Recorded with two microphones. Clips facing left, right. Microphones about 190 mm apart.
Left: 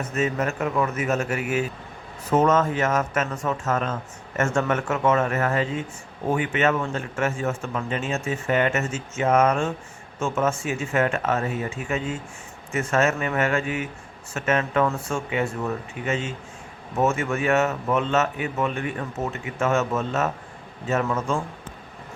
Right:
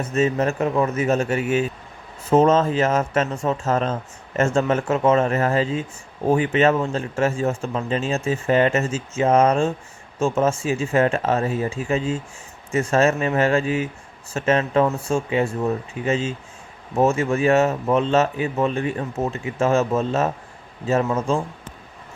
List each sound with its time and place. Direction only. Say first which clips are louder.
0.1 s speech: right 5 dB; 25° right (ahead or behind)